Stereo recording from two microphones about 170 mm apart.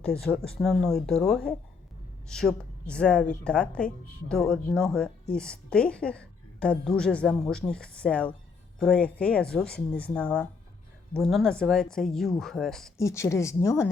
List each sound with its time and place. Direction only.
0.6 s a woman's voice: 5° left (ahead or behind)
13.0 s speech: 15° left (ahead or behind)